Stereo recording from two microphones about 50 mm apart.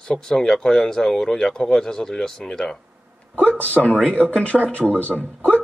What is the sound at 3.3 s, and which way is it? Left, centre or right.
Speech, left.